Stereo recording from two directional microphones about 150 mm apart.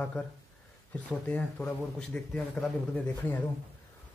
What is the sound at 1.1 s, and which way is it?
A man's voice, 10° left (ahead or behind).